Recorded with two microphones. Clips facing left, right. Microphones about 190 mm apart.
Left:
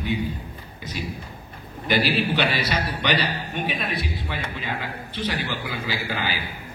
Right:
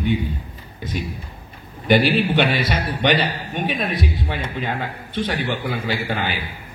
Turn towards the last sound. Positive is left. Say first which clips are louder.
# right 5 dB
turn(degrees=-55)  # may be behind; listen again after turning